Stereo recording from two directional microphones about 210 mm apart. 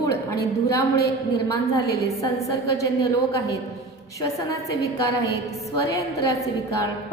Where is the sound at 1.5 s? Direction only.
15° left (ahead or behind).